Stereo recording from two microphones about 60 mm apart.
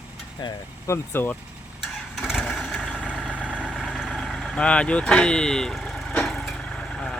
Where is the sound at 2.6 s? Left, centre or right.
Centre.